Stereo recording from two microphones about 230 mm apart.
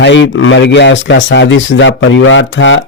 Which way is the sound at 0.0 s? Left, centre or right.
Left.